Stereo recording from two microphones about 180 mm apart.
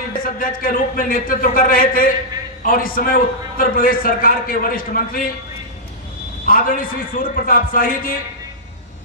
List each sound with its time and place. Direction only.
0.2 s a man's voice: 50° left (ahead or behind)
6.4 s a man's voice: 50° left (ahead or behind)